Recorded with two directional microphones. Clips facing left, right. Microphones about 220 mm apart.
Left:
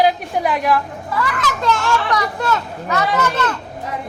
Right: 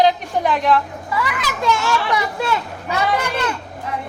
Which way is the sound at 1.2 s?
5° right (ahead or behind).